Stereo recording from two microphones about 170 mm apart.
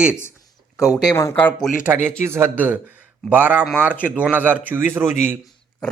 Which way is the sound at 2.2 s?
15° right (ahead or behind).